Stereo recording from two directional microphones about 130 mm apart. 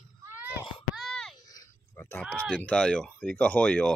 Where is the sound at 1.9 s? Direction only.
15° left (ahead or behind).